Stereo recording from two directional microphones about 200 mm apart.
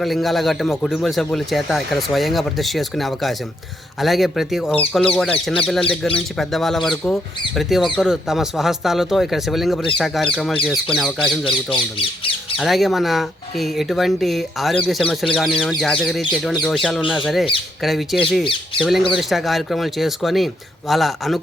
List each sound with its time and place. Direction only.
0.0 s speech: centre (ahead or behind)
11.7 s speech: 25° left (ahead or behind)
12.5 s speech: centre (ahead or behind)